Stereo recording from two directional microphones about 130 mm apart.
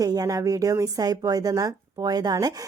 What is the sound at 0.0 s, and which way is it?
A woman's voice, 30° right (ahead or behind).